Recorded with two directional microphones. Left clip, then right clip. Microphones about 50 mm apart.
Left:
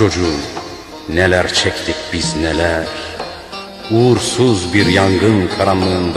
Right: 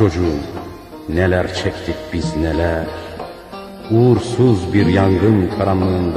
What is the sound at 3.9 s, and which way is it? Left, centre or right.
Speech, left.